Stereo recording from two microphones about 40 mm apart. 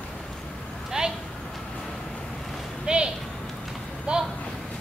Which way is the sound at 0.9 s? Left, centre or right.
Centre.